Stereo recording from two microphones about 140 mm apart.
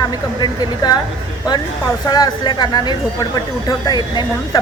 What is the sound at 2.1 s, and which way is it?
A woman's voice, 30° left (ahead or behind).